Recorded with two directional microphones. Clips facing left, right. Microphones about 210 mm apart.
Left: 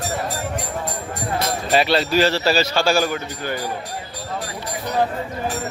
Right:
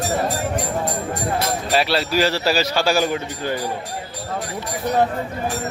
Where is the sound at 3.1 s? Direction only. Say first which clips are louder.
Right 2 dB; 30° right (ahead or behind).